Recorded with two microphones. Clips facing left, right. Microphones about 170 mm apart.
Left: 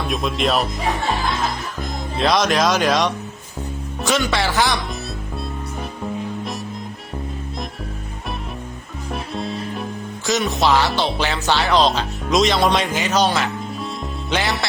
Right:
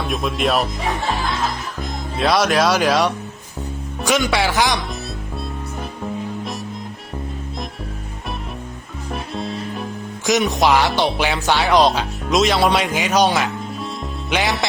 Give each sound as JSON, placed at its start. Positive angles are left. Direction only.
{"t": 0.0, "sound": "speech", "side_deg": 0}
{"t": 4.0, "sound": "music", "side_deg": -10}
{"t": 9.1, "sound": "music", "side_deg": 0}
{"t": 10.2, "sound": "music", "side_deg": -15}